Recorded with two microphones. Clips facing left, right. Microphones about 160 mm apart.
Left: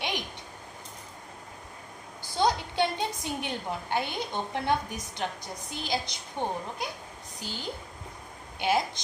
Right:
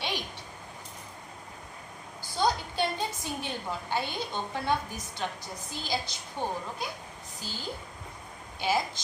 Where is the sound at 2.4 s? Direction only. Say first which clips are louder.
Left 2 dB; 20° left (ahead or behind).